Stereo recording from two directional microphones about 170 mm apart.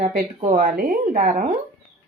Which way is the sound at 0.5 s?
55° right (ahead or behind).